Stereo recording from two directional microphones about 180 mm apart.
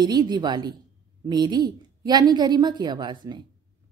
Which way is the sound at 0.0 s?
25° right (ahead or behind).